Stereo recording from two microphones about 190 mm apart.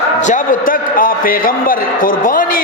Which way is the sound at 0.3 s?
45° left (ahead or behind).